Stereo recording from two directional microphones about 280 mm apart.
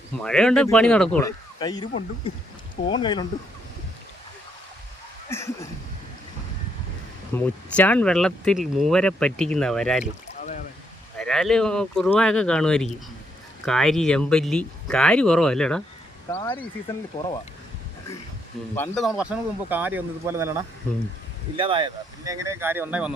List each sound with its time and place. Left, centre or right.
0.2 s speech: centre
1.5 s speech: centre
5.3 s speech: centre
7.3 s speech: centre
11.2 s speech: centre
18.7 s speech: centre